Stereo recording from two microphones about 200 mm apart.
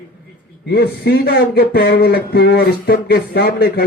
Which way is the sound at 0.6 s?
50° left (ahead or behind).